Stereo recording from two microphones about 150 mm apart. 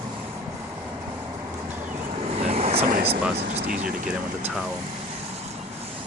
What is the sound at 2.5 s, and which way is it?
Vehicle, 45° right (ahead or behind).